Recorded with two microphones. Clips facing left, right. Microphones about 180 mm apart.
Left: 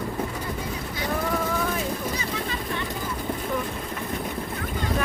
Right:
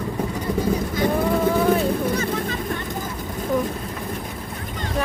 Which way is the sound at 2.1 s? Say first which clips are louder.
Right 6 dB; 50° right (ahead or behind).